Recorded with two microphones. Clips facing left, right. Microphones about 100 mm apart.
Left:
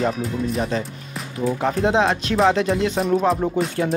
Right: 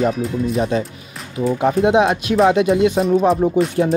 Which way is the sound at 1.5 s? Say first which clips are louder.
Right 5 dB; 10° right (ahead or behind).